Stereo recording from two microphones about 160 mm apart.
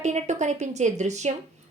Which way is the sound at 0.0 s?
45° right (ahead or behind).